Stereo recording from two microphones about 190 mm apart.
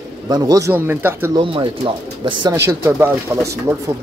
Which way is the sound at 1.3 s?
25° right (ahead or behind).